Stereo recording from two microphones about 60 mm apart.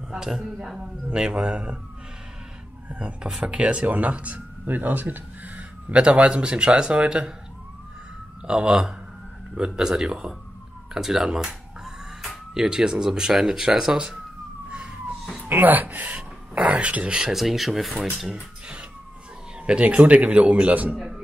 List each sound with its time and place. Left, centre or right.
0.1 s speech: centre
2.9 s speech: centre
8.5 s speech: centre
14.7 s emergency vehicle: centre
15.4 s speech: right
17.3 s speech: centre
19.6 s speech: centre